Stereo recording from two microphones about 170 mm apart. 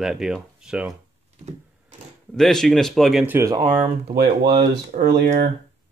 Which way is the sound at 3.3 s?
15° right (ahead or behind).